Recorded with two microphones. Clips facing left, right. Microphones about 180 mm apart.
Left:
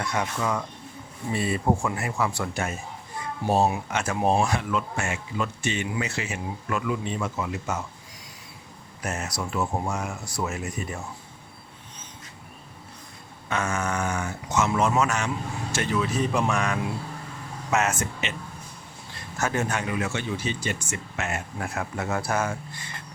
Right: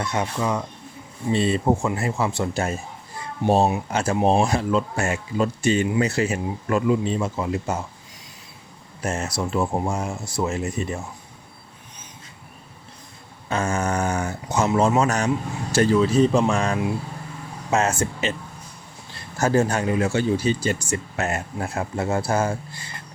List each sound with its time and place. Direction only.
0.0 s speech: 25° right (ahead or behind)
9.0 s speech: 25° right (ahead or behind)
13.5 s speech: 30° right (ahead or behind)
19.4 s speech: 35° right (ahead or behind)